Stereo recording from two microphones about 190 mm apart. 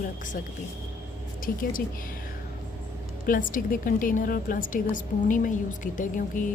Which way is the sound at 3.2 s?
45° left (ahead or behind).